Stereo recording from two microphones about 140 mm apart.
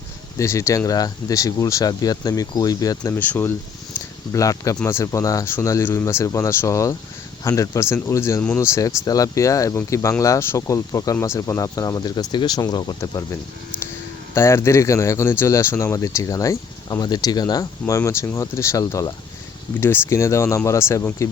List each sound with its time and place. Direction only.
0.3 s speech: 20° left (ahead or behind)
3.2 s speech: 15° left (ahead or behind)
14.3 s speech: 20° left (ahead or behind)